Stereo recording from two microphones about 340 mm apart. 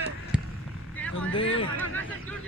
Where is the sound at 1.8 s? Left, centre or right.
Centre.